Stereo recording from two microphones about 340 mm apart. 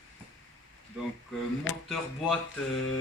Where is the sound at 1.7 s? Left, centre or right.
Left.